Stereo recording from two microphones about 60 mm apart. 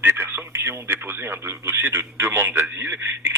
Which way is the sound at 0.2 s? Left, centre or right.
Right.